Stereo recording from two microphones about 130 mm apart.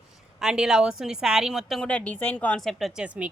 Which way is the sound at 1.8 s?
10° left (ahead or behind).